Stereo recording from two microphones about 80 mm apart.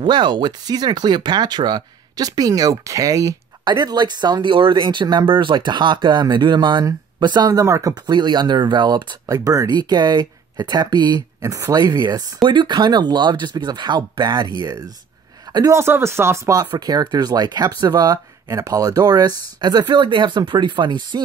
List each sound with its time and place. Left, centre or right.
0.0 s speech: right
3.6 s speech: right
7.9 s speech: right
9.8 s speech: right
11.4 s speech: right
12.4 s speech: right
14.6 s speech: right
15.7 s speech: right
16.7 s speech: right
19.9 s speech: right